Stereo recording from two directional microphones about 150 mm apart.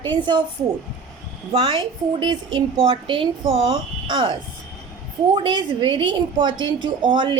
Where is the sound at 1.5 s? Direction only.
40° right (ahead or behind).